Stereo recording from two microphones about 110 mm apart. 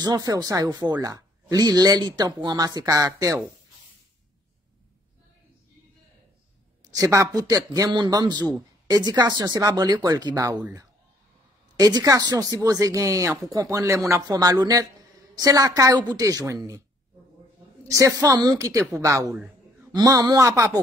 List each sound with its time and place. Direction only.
0.0 s speech: 35° right (ahead or behind)
6.8 s speech: 35° right (ahead or behind)
17.8 s speech: 30° right (ahead or behind)
19.3 s a sound: 10° right (ahead or behind)
19.9 s speech: 35° right (ahead or behind)